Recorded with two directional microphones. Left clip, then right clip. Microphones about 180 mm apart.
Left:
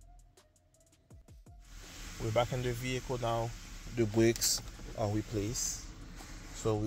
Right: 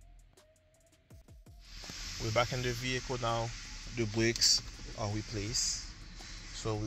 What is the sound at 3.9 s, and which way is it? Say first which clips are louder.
Speech: left 3 dB; 30° left (ahead or behind).